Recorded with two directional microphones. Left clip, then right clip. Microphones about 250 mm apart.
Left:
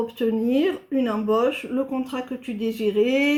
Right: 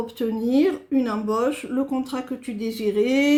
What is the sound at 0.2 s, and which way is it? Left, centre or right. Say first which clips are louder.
Speech: right 1 dB; right.